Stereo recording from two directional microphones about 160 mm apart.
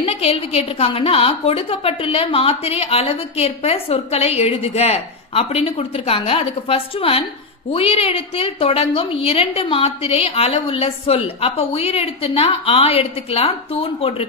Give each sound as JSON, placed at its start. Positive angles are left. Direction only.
{"t": 0.0, "sound": "a woman's voice", "side_deg": 40}